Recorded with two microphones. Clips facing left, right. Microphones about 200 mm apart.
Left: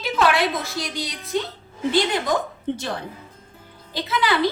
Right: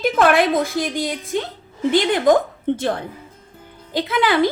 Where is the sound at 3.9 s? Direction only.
55° right (ahead or behind).